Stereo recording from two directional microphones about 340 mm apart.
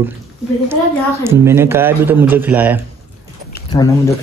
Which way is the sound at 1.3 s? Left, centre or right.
Centre.